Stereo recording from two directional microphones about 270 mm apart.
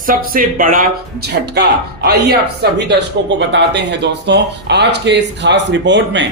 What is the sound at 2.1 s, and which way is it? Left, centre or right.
Speech, right.